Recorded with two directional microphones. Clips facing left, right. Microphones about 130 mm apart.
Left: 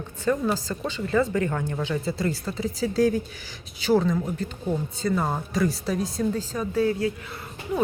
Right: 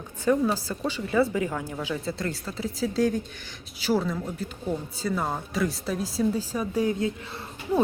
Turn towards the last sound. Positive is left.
turn(degrees=-25)  # may be behind; listen again after turning